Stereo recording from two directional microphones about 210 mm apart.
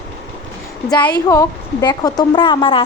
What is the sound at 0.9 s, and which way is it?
A woman's voice, 20° left (ahead or behind).